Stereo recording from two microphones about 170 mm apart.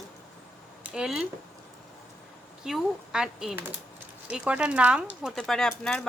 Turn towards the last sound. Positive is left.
turn(degrees=5)  # may be behind; listen again after turning